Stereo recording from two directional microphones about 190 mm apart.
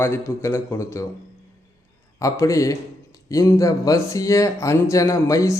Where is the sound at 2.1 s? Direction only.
15° left (ahead or behind).